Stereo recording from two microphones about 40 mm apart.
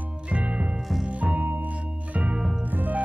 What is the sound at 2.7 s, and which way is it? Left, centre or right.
Music, right.